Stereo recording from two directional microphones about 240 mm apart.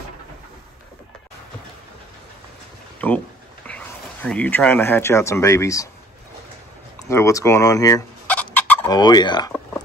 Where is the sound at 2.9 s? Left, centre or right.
Centre.